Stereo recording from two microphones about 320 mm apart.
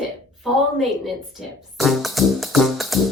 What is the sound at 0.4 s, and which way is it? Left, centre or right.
Music, centre.